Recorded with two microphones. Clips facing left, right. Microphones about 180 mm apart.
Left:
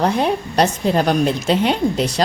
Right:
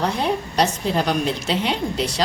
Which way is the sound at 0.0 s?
55° left (ahead or behind).